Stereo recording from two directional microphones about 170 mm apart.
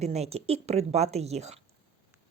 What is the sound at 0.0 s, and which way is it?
A woman's voice, 40° right (ahead or behind).